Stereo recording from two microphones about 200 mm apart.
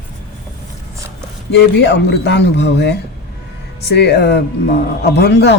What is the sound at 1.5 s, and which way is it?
A man's voice, 60° left (ahead or behind).